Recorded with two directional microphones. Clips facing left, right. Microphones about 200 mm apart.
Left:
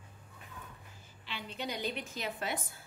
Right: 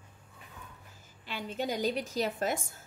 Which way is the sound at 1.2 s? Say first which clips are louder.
Right 6 dB; 45° right (ahead or behind).